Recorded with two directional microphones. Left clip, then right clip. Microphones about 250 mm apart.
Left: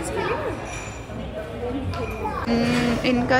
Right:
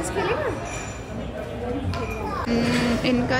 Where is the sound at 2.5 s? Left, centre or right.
Centre.